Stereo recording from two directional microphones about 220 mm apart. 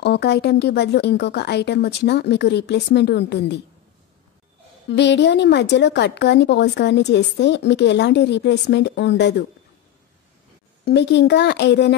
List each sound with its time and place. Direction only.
0.0 s a woman's voice: 50° left (ahead or behind)
4.8 s a woman's voice: 50° left (ahead or behind)
10.9 s a woman's voice: 50° left (ahead or behind)